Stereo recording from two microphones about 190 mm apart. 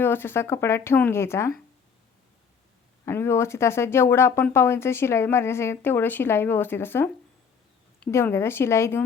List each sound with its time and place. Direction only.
0.0 s speech: 10° left (ahead or behind)
3.1 s speech: 15° left (ahead or behind)